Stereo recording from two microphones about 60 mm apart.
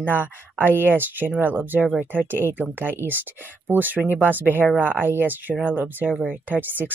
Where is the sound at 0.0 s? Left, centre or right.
Right.